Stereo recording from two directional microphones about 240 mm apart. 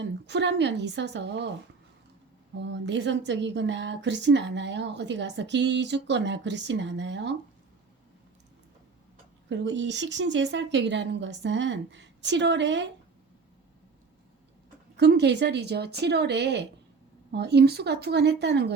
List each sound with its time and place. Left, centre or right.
0.0 s a woman's voice: right
2.6 s a woman's voice: right
9.5 s a woman's voice: right
14.9 s a woman's voice: right